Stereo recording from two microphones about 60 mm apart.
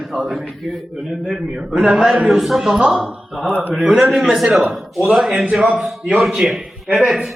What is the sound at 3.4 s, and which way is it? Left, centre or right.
A man's voice, right.